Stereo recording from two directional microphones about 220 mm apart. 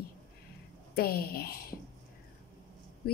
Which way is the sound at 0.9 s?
45° left (ahead or behind).